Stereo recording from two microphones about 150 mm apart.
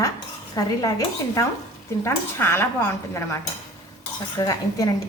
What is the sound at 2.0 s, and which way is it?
Speech, 15° left (ahead or behind).